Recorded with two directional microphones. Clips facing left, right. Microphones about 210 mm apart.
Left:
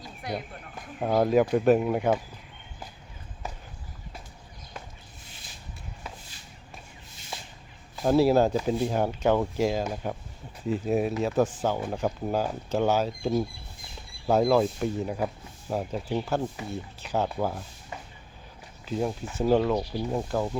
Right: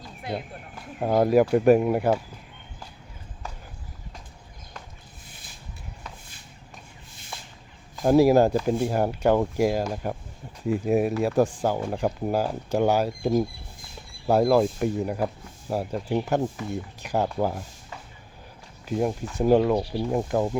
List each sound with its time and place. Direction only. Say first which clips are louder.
0.2 s a sound: right 2 dB; 25° right (ahead or behind)
0.9 s speech: right 3 dB; 5° right (ahead or behind)
8.0 s speech: right 3 dB; 10° right (ahead or behind)
18.9 s speech: right 3 dB; 10° right (ahead or behind)